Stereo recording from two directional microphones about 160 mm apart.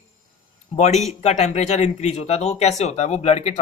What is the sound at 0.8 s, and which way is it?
A man's voice, 45° left (ahead or behind).